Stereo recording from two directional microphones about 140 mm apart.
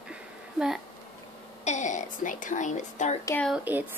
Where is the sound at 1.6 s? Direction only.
60° left (ahead or behind).